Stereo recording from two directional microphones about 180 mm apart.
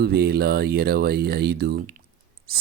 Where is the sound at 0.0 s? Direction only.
60° right (ahead or behind).